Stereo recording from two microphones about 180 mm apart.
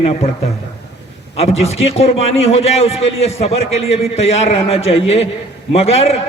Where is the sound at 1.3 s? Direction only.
35° left (ahead or behind).